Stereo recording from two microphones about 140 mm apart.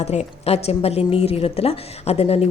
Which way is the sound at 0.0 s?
50° left (ahead or behind).